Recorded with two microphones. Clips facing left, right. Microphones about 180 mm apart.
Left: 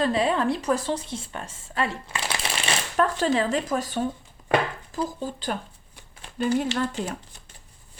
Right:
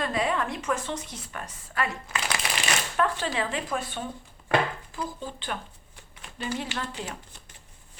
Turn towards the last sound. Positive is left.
turn(degrees=45)  # may be behind; listen again after turning